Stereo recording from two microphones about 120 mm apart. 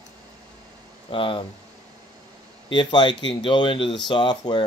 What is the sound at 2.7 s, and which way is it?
Speech, 40° left (ahead or behind).